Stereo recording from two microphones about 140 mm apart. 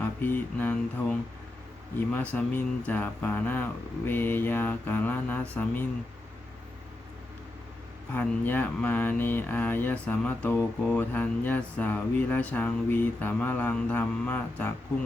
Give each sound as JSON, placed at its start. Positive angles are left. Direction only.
{"t": 0.0, "sound": "speech", "side_deg": 15}
{"t": 2.1, "sound": "speech", "side_deg": 10}
{"t": 8.1, "sound": "speech", "side_deg": 10}